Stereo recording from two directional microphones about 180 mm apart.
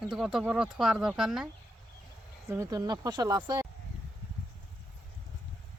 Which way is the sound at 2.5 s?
20° right (ahead or behind).